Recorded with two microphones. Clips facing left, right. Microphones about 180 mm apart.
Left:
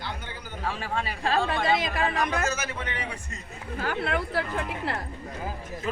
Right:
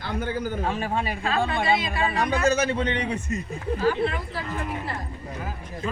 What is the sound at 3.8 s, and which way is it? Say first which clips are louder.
A woman's voice: right 3 dB; 65° left (ahead or behind).